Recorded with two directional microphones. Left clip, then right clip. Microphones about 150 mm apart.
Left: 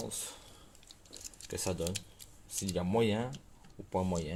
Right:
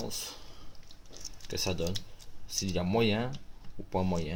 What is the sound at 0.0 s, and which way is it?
Speech, 5° left (ahead or behind).